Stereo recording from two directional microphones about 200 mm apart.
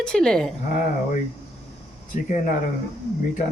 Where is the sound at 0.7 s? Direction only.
40° left (ahead or behind).